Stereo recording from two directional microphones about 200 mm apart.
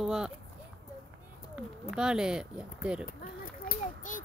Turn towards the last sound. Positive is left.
turn(degrees=40)  # may be behind; listen again after turning